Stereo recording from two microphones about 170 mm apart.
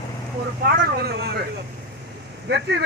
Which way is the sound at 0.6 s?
65° right (ahead or behind).